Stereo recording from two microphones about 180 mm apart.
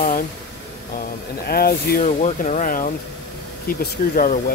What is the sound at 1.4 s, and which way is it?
Speech, 55° left (ahead or behind).